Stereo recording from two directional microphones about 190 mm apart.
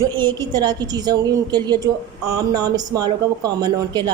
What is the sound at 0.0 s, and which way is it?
A woman's voice, 20° right (ahead or behind).